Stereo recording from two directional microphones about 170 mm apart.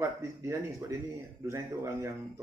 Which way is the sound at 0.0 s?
15° right (ahead or behind).